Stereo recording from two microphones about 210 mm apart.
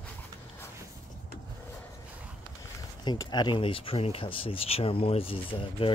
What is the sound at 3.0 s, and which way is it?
Speech, 20° left (ahead or behind).